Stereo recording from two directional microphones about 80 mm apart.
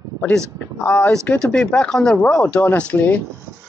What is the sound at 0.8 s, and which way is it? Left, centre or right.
Speech, centre.